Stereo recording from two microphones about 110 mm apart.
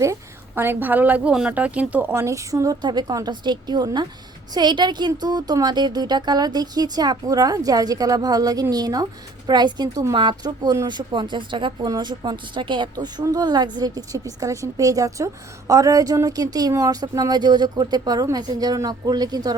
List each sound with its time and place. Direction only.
0.0 s a woman's voice: 25° right (ahead or behind)
2.8 s a woman's voice: 40° right (ahead or behind)